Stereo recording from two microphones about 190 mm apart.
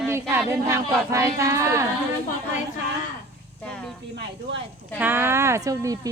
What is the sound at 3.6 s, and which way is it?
Speech, 5° left (ahead or behind).